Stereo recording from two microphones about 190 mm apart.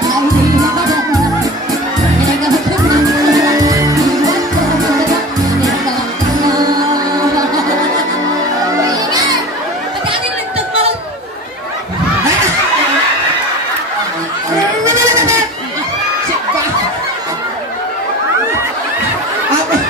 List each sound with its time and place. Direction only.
0.1 s music: 20° right (ahead or behind)
3.1 s music: 20° right (ahead or behind)
6.4 s music: 20° right (ahead or behind)
8.6 s music: 20° right (ahead or behind)
14.9 s goat: 15° right (ahead or behind)